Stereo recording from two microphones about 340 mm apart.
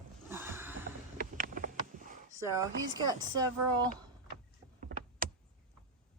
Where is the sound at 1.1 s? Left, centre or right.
Right.